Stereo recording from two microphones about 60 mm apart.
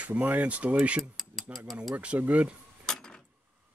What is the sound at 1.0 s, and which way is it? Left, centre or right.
Mechanisms, centre.